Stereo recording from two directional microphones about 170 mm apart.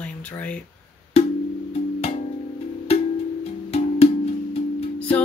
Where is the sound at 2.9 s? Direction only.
35° left (ahead or behind).